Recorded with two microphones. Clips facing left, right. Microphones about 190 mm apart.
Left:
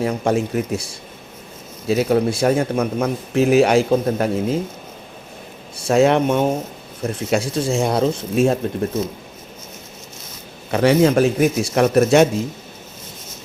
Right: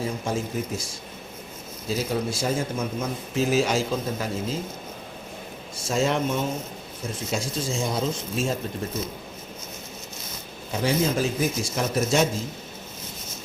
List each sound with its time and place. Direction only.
0.0 s speech: 70° left (ahead or behind)
5.7 s speech: 65° left (ahead or behind)
10.7 s speech: 70° left (ahead or behind)